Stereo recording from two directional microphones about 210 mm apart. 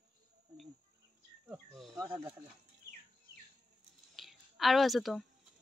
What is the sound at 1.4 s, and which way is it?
Cricket, centre (ahead or behind).